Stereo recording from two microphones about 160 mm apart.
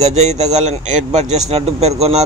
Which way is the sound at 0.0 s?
45° right (ahead or behind).